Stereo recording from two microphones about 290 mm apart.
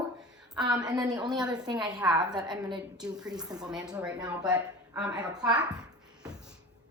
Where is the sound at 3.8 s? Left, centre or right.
Centre.